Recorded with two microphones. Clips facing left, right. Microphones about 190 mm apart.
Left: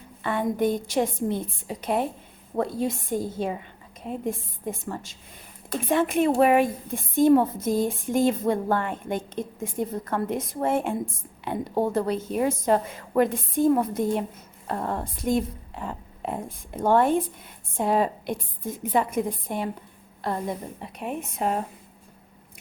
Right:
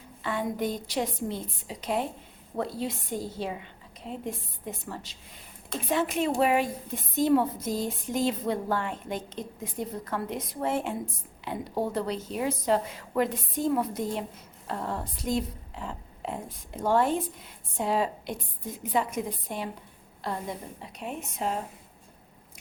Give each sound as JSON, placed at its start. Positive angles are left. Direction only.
{"t": 0.2, "sound": "a woman's voice", "side_deg": 55}